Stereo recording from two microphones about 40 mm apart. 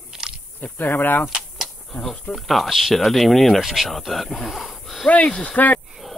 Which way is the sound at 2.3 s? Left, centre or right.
Centre.